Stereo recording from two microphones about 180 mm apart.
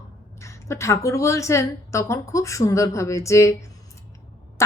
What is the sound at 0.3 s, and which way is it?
A woman's voice, 15° left (ahead or behind).